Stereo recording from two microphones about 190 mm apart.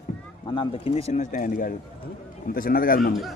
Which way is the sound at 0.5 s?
25° left (ahead or behind).